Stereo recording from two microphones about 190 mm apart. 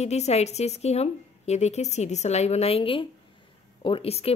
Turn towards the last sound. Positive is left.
turn(degrees=30)  # may be behind; listen again after turning